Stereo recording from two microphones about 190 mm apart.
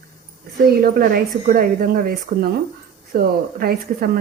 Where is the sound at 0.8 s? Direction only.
55° right (ahead or behind).